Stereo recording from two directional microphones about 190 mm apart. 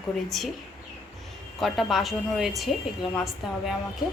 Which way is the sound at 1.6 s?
Centre (ahead or behind).